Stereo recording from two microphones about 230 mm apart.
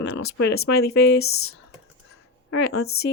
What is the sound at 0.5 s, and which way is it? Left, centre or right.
Speech, left.